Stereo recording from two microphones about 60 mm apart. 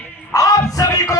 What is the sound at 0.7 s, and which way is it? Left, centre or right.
Music, left.